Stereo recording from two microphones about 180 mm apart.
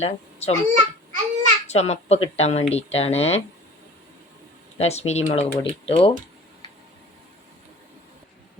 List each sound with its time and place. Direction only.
0.0 s a child's voice: 35° left (ahead or behind)
0.7 s babbling: 40° right (ahead or behind)
1.6 s speech: 35° left (ahead or behind)
4.8 s speech: 35° left (ahead or behind)